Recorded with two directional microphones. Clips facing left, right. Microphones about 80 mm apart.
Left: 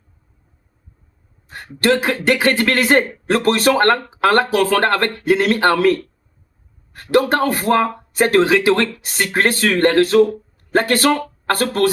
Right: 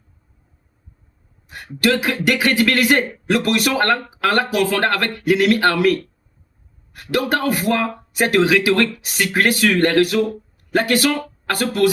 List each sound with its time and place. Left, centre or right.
1.5 s speech: left